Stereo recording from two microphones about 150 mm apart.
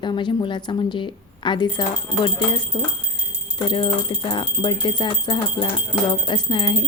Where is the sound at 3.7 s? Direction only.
35° left (ahead or behind).